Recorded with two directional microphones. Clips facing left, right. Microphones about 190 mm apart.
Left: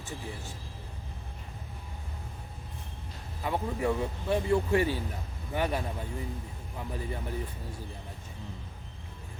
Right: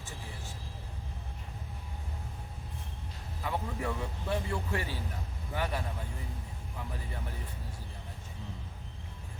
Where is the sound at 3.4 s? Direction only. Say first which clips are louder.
Left 5 dB; 20° left (ahead or behind).